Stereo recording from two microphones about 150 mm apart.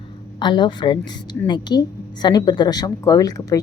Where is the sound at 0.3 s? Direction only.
30° left (ahead or behind).